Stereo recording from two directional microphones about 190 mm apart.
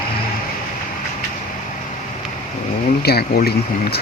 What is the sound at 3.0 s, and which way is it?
Speech, 55° left (ahead or behind).